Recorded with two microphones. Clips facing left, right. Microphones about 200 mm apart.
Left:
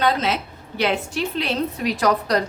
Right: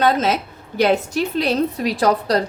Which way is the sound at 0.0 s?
45° right (ahead or behind).